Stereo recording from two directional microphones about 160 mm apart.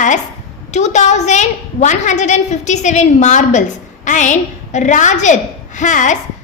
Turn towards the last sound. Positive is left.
turn(degrees=50)  # may be behind; listen again after turning